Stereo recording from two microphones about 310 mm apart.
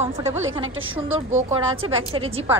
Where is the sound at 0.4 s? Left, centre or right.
Right.